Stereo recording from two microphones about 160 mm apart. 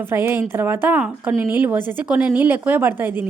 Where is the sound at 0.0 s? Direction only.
15° right (ahead or behind).